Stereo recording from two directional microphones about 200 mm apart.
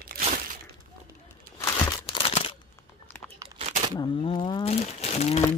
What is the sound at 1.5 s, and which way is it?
Crumpling, 20° left (ahead or behind).